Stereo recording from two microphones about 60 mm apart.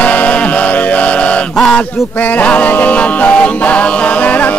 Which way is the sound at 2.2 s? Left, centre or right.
Left.